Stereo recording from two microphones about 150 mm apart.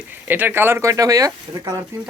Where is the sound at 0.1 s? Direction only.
15° right (ahead or behind).